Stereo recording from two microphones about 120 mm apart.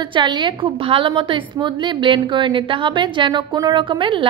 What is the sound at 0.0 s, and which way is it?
A woman's voice, 40° right (ahead or behind).